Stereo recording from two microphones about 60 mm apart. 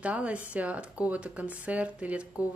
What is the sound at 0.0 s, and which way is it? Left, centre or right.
Speech, right.